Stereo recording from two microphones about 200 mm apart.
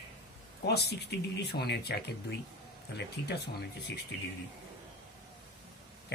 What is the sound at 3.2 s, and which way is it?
Speech, 55° left (ahead or behind).